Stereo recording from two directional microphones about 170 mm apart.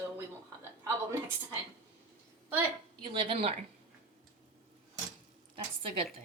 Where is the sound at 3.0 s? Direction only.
30° right (ahead or behind).